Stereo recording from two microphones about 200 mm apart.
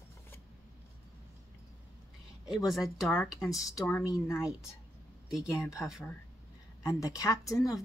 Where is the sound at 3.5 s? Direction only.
10° left (ahead or behind).